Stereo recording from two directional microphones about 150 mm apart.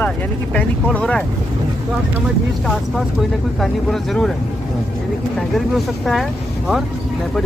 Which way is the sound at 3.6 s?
Centre (ahead or behind).